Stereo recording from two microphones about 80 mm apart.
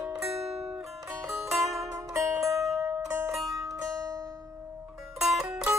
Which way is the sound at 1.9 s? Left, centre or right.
Right.